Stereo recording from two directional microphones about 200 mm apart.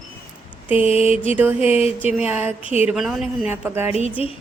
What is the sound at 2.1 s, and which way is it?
Speech, 10° right (ahead or behind).